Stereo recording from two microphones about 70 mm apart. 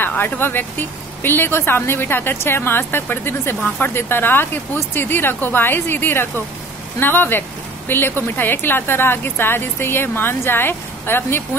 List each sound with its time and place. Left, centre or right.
0.2 s speech: left